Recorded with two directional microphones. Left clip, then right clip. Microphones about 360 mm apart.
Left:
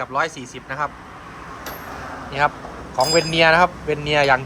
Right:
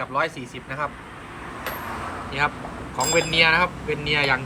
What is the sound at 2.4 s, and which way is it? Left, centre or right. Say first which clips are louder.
Speech: left 5 dB; centre.